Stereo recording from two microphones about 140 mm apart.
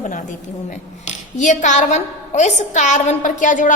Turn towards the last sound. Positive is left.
turn(degrees=65)  # may be behind; listen again after turning